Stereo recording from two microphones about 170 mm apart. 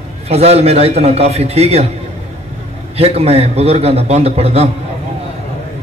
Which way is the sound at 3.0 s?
35° right (ahead or behind).